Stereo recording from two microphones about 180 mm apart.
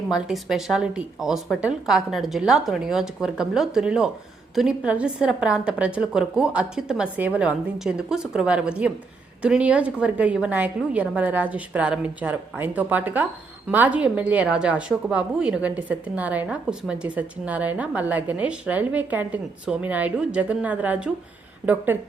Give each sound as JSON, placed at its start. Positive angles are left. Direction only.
{"t": 0.1, "sound": "a woman's voice", "side_deg": 0}